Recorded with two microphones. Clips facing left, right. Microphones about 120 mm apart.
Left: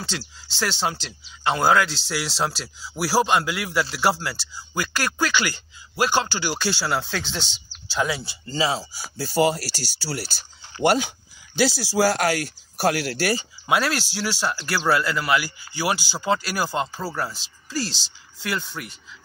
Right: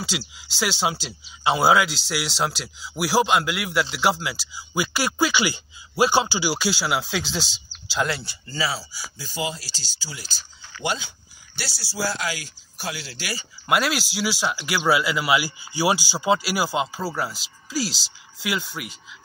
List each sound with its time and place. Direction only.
0.4 s speech: 5° right (ahead or behind)
8.5 s speech: 20° left (ahead or behind)
8.9 s speech: 65° left (ahead or behind)
13.7 s speech: centre (ahead or behind)